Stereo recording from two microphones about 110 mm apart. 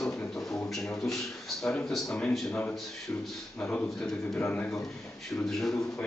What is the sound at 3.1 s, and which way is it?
A man's voice, 20° left (ahead or behind).